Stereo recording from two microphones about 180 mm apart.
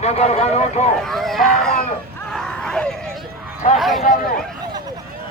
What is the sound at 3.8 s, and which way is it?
Speech, centre (ahead or behind).